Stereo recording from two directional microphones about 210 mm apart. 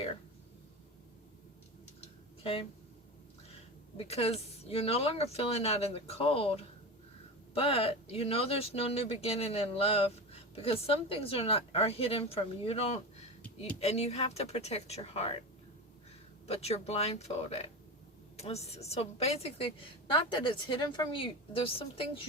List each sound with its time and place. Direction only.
2.0 s a sound: 25° left (ahead or behind)
3.9 s speech: 30° left (ahead or behind)
16.5 s speech: 30° left (ahead or behind)